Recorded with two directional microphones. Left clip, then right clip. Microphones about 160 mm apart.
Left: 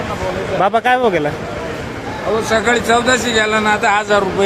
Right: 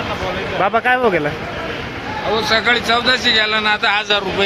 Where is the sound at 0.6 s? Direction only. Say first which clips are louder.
Left 1 dB; 25° left (ahead or behind).